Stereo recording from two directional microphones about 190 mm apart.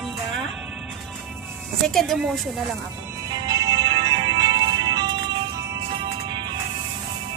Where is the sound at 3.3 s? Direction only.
20° right (ahead or behind).